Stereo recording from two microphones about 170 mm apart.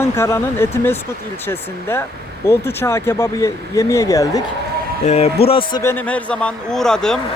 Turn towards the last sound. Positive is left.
turn(degrees=5)  # may be behind; listen again after turning